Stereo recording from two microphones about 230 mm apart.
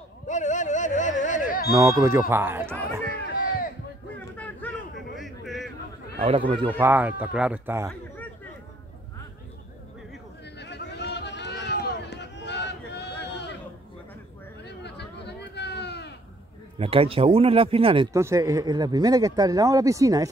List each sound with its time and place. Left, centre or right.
0.3 s music: left
1.7 s speech: centre
4.4 s a sound: centre
6.1 s speech: right
6.8 s speech: centre
10.6 s run: left
14.6 s a sound: left
16.7 s speech: right